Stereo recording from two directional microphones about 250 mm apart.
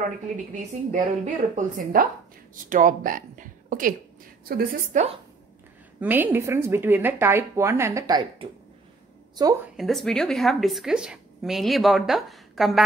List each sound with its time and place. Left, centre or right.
0.6 s a woman's voice: right
5.9 s a woman's voice: centre
9.8 s a woman's voice: centre